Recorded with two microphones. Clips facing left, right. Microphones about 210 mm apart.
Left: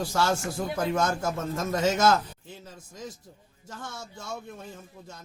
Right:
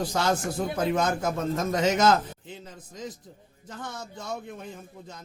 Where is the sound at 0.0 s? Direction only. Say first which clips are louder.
Right 1 dB; 20° right (ahead or behind).